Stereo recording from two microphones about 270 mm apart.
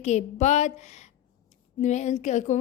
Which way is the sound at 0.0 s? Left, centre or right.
Left.